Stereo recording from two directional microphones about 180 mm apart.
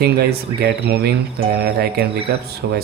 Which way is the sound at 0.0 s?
60° right (ahead or behind).